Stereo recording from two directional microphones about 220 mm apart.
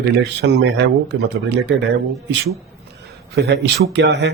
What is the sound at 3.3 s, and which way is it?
Speech, 50° right (ahead or behind).